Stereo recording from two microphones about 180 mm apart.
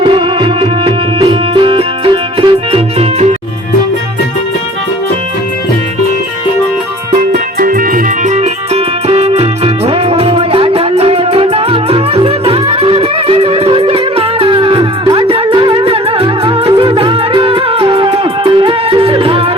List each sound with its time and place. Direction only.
0.0 s music: 30° right (ahead or behind)
7.2 s music: 50° right (ahead or behind); by 19.5 s 30° right (ahead or behind)